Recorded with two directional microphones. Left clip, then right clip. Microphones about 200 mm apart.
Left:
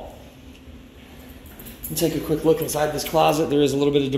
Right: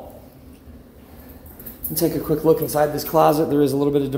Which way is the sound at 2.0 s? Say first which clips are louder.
Right 2 dB; 30° right (ahead or behind).